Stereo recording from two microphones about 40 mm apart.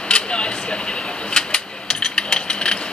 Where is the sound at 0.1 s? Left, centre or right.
Left.